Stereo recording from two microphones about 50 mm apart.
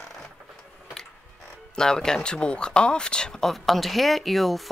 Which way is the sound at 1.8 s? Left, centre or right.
Centre.